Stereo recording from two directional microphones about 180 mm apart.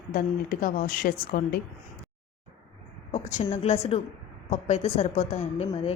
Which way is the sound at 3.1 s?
40° left (ahead or behind).